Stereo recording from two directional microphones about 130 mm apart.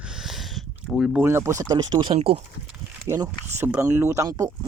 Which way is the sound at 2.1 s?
50° right (ahead or behind).